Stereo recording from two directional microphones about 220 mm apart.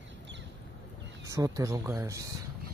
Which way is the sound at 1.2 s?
15° right (ahead or behind).